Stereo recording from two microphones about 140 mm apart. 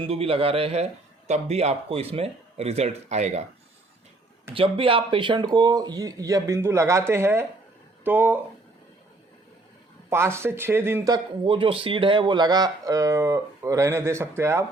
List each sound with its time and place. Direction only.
0.0 s speech: 40° right (ahead or behind)
4.5 s speech: 40° right (ahead or behind); by 8.4 s 15° right (ahead or behind)
10.1 s speech: 20° right (ahead or behind)
11.1 s speech: 35° right (ahead or behind); by 14.6 s 20° right (ahead or behind)